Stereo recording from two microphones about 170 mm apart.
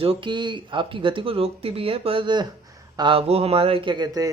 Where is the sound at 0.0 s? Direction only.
30° right (ahead or behind).